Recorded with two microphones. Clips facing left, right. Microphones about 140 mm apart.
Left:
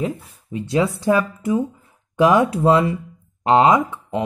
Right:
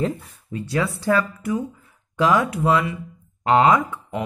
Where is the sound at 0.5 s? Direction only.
20° left (ahead or behind).